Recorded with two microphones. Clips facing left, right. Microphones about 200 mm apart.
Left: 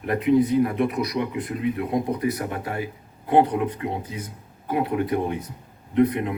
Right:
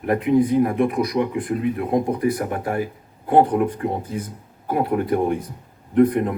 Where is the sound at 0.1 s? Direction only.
50° right (ahead or behind).